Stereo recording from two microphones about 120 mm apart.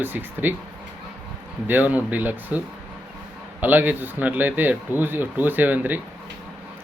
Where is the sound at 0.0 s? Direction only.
15° right (ahead or behind).